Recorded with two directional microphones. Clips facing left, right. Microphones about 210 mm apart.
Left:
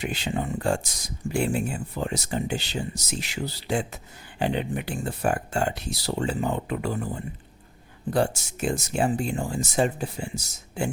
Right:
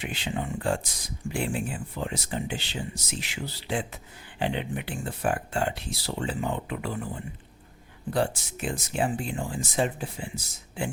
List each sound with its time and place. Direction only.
0.0 s speech: 40° left (ahead or behind)
8.1 s speech: 45° left (ahead or behind)